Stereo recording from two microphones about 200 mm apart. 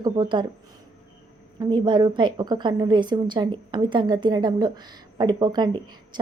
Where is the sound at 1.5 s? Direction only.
20° right (ahead or behind).